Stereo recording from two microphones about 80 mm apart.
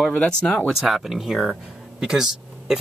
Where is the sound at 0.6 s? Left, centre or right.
Centre.